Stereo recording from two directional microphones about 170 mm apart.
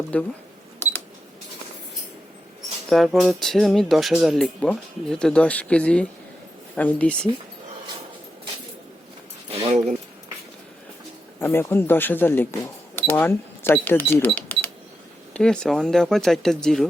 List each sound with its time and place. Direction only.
0.1 s speech: 10° left (ahead or behind)
2.9 s speech: centre (ahead or behind)
9.5 s keys jangling: 35° right (ahead or behind)
11.3 s speech: 15° left (ahead or behind)